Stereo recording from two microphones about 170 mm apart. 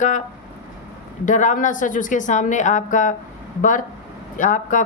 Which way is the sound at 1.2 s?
50° left (ahead or behind).